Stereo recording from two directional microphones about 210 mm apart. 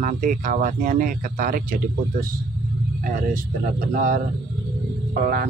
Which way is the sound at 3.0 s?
40° right (ahead or behind).